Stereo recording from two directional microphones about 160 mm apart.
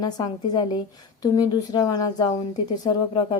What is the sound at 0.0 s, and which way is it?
Speech, 25° left (ahead or behind).